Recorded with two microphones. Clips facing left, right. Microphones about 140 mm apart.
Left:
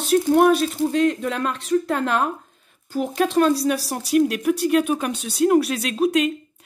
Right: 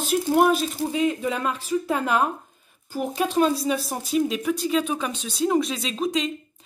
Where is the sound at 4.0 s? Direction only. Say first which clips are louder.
Left 7 dB; 70° left (ahead or behind).